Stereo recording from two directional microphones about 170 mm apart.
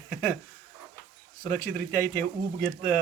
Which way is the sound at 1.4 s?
15° left (ahead or behind).